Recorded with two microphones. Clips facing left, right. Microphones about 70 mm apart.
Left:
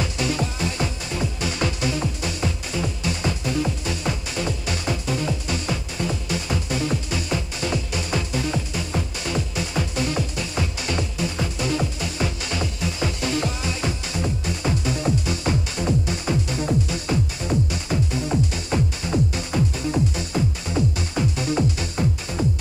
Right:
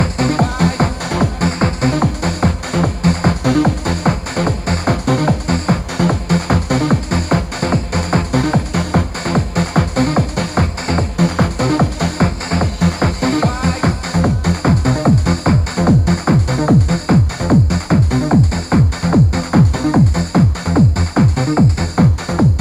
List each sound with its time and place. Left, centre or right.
0.0 s music: right
1.6 s music: right